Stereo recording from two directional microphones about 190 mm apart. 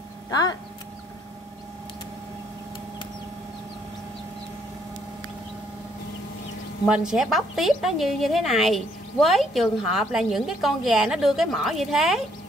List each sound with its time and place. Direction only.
0.3 s speech: 20° left (ahead or behind)
6.9 s a woman's voice: 5° right (ahead or behind)